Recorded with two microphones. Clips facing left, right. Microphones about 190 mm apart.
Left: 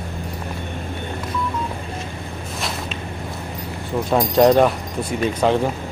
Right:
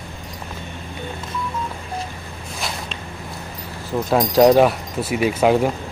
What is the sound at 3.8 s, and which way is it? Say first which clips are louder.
Speech: right 1 dB; centre (ahead or behind).